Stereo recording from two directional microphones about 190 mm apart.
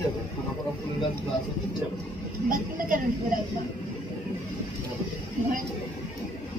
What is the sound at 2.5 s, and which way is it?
Speech, 45° right (ahead or behind).